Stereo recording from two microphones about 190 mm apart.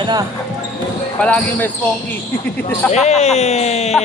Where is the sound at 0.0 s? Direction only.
20° right (ahead or behind).